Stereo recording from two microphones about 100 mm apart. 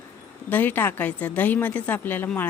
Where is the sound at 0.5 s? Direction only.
20° left (ahead or behind).